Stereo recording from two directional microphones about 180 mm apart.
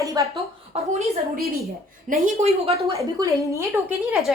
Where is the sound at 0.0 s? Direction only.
20° right (ahead or behind).